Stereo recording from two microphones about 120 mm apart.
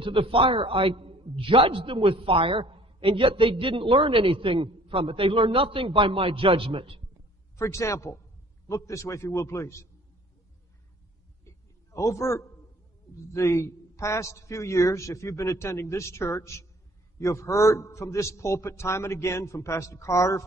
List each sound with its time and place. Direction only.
0.0 s a man's voice: 45° right (ahead or behind)
7.5 s a man's voice: 25° left (ahead or behind)
11.9 s a man's voice: 25° left (ahead or behind)